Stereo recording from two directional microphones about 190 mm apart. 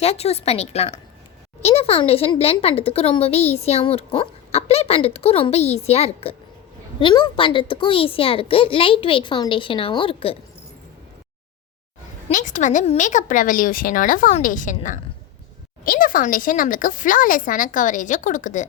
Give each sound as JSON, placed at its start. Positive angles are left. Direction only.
{"t": 0.0, "sound": "a child's voice", "side_deg": 35}
{"t": 12.3, "sound": "speech", "side_deg": 40}